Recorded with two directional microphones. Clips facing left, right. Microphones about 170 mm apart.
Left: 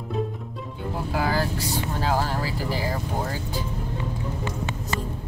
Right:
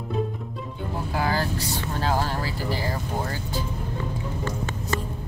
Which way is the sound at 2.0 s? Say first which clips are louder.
Even; 10° left (ahead or behind).